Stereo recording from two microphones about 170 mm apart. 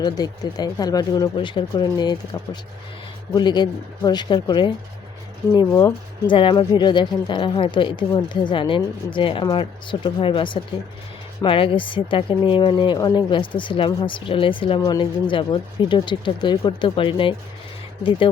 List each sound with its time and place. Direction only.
0.0 s speech: 25° left (ahead or behind)
3.3 s speech: 25° left (ahead or behind)